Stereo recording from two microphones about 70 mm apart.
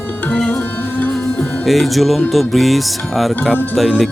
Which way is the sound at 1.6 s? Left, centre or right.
Centre.